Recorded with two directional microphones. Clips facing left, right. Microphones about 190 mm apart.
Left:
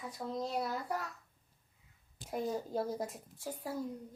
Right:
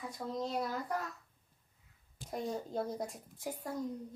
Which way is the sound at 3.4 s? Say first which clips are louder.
Right 1 dB; 15° right (ahead or behind).